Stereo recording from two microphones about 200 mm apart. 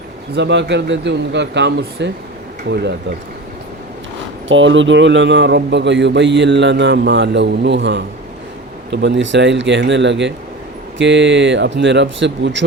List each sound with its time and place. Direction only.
0.3 s a man's voice: 60° right (ahead or behind)
4.4 s a man's voice: 70° right (ahead or behind)